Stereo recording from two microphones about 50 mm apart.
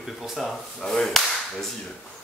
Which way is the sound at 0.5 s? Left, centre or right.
Centre.